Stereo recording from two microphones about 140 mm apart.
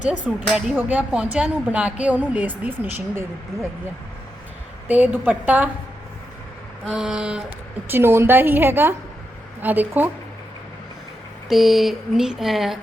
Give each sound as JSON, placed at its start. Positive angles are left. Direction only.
{"t": 0.0, "sound": "speech", "side_deg": -10}
{"t": 0.4, "sound": "a sound", "side_deg": 0}
{"t": 0.8, "sound": "speech", "side_deg": -10}
{"t": 4.9, "sound": "speech", "side_deg": -10}
{"t": 6.9, "sound": "speech", "side_deg": -5}
{"t": 7.9, "sound": "speech", "side_deg": -15}
{"t": 11.4, "sound": "a sound", "side_deg": 0}